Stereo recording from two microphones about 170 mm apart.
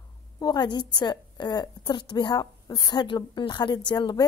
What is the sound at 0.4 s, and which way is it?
A woman's voice, 25° left (ahead or behind).